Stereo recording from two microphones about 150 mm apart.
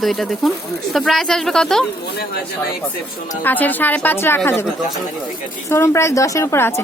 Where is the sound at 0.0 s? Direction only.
Centre (ahead or behind).